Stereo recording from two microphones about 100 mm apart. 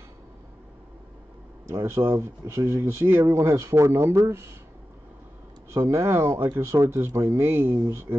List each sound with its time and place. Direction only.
1.7 s speech: 25° right (ahead or behind)
5.7 s speech: 30° right (ahead or behind)